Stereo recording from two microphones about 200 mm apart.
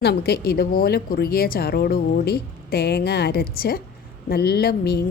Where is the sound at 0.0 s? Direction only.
55° left (ahead or behind).